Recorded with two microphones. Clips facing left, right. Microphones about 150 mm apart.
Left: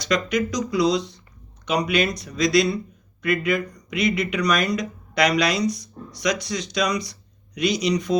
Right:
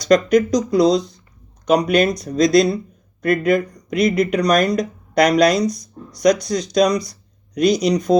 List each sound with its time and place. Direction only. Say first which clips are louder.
0.1 s speech: right 9 dB; 40° right (ahead or behind)